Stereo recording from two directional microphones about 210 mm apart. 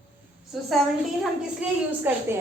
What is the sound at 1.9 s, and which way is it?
Speech, 10° right (ahead or behind).